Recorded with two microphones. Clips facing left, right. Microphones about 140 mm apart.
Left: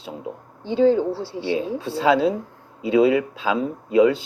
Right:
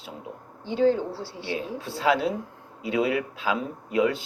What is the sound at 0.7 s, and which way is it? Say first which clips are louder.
Speech: left 5 dB; 20° left (ahead or behind).